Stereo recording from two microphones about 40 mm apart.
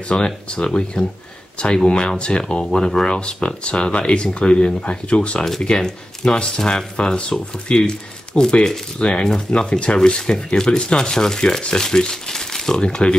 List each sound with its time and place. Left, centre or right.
0.1 s speech: left
12.8 s speech: left